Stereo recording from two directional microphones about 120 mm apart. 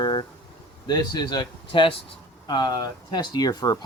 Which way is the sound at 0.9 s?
40° left (ahead or behind).